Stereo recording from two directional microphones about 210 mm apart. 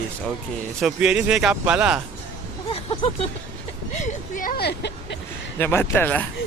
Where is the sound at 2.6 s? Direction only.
25° left (ahead or behind); by 5.1 s 50° left (ahead or behind).